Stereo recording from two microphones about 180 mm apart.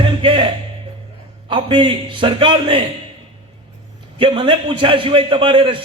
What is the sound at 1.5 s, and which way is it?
A man's voice, 30° right (ahead or behind).